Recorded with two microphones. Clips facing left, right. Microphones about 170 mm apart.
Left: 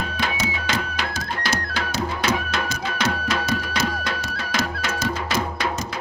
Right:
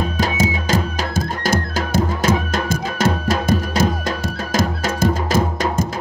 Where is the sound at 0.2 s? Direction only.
45° right (ahead or behind).